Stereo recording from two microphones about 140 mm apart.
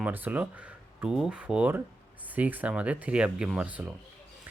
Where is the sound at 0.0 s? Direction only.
10° right (ahead or behind).